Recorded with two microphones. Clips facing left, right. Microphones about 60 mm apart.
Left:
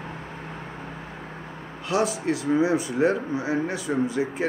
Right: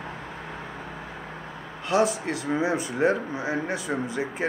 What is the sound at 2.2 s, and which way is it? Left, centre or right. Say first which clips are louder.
Speech: left 4 dB; right.